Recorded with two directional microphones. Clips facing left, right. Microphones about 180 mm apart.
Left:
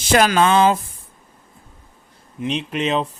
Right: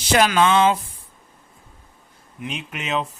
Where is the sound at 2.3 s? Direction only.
30° left (ahead or behind).